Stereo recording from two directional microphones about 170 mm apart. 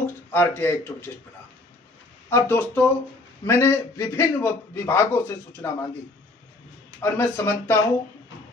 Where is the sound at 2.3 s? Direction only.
10° left (ahead or behind).